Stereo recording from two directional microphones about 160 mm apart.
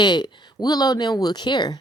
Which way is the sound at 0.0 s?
30° left (ahead or behind).